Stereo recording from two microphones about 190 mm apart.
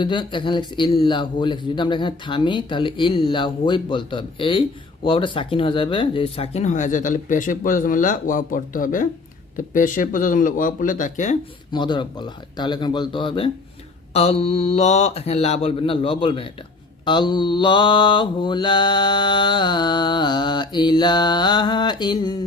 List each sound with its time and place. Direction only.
0.0 s mantra: 25° left (ahead or behind)
5.0 s speech: 25° left (ahead or behind)
11.7 s mantra: 25° left (ahead or behind)
14.1 s speech: 35° left (ahead or behind)
17.1 s mantra: 25° left (ahead or behind)